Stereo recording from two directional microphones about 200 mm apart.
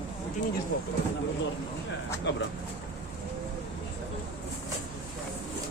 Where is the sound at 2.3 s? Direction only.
65° left (ahead or behind).